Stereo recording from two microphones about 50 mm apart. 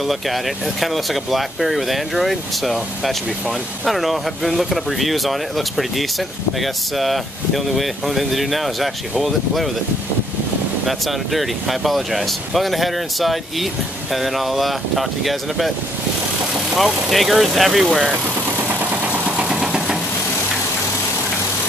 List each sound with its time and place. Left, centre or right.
0.0 s speech: centre
10.9 s speech: centre
16.7 s speech: centre
18.6 s vehicle: right
19.2 s engine: right